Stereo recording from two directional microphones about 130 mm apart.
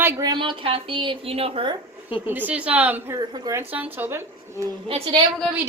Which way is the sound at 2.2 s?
15° right (ahead or behind).